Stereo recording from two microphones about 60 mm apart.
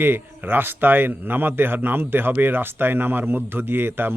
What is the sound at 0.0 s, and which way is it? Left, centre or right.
Speech, right.